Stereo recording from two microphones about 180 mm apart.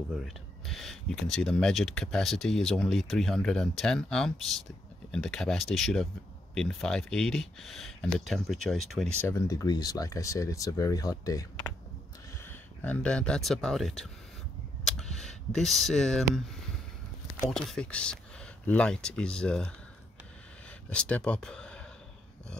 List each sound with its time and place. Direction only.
0.1 s speech: centre (ahead or behind)
9.3 s speech: 15° left (ahead or behind)
12.4 s speech: 10° left (ahead or behind)
20.9 s speech: 5° left (ahead or behind)